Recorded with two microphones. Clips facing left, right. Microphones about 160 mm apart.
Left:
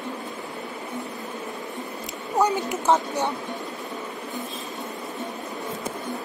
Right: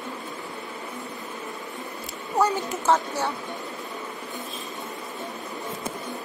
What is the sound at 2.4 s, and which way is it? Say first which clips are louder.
Speech: left 1 dB; 15° left (ahead or behind).